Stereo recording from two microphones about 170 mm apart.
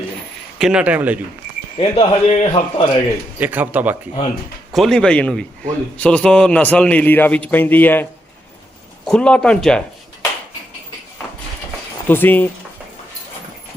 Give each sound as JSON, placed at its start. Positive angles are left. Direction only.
{"t": 0.6, "sound": "a man's voice", "side_deg": -5}
{"t": 1.8, "sound": "a man's voice", "side_deg": 30}
{"t": 3.3, "sound": "a man's voice", "side_deg": -10}
{"t": 4.7, "sound": "a man's voice", "side_deg": 0}
{"t": 9.0, "sound": "a man's voice", "side_deg": 5}
{"t": 12.0, "sound": "a man's voice", "side_deg": 10}